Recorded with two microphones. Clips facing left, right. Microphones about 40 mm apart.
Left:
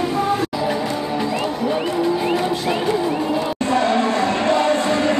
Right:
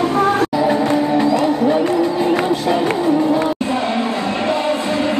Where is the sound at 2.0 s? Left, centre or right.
Centre.